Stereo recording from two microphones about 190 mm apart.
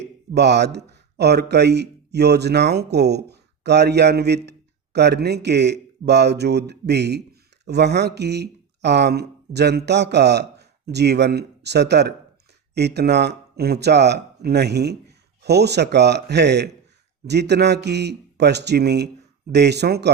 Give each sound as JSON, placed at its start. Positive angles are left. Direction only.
{"t": 0.3, "sound": "a man's voice", "side_deg": -65}